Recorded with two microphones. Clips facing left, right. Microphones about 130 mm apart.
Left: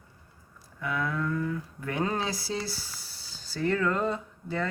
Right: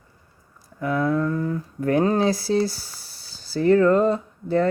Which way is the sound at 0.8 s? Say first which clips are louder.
Right 9 dB; 40° right (ahead or behind).